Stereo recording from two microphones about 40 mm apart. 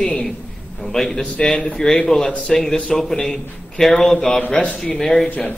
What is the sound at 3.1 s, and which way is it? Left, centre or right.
Speech, left.